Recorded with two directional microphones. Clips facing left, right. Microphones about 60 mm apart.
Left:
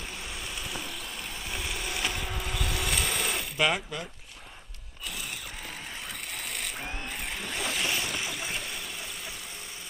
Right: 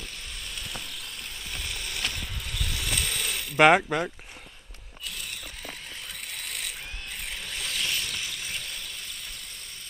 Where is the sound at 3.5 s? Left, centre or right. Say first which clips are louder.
Right 11 dB; right.